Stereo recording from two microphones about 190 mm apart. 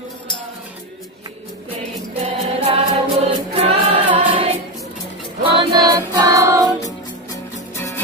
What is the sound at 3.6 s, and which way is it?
Choir, 30° right (ahead or behind).